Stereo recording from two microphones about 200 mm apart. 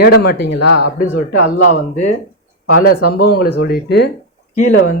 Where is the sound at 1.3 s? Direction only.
90° left.